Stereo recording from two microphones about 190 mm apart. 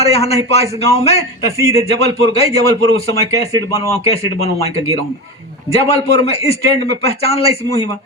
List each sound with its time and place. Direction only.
0.0 s a man's voice: 35° left (ahead or behind)
5.7 s a man's voice: 30° left (ahead or behind)